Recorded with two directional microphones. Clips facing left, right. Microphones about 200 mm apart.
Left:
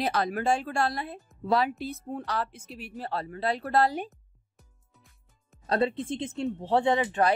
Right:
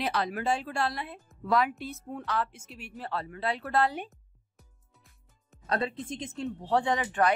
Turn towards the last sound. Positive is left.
turn(degrees=25)  # may be behind; listen again after turning